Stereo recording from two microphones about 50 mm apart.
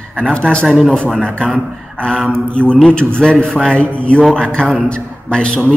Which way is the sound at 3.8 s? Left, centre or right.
Left.